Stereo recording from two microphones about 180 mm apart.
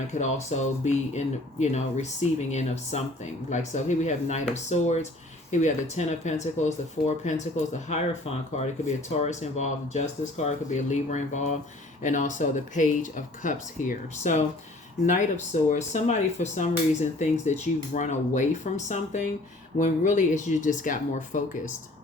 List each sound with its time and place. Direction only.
0.1 s speech: 40° left (ahead or behind)